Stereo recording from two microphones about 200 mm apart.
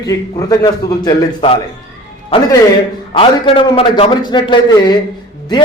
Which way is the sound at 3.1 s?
25° left (ahead or behind).